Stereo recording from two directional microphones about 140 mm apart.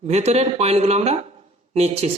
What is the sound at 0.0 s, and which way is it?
A woman's voice, 50° right (ahead or behind).